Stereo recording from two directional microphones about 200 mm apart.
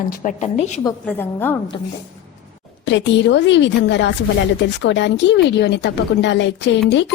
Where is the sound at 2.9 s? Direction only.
65° left (ahead or behind).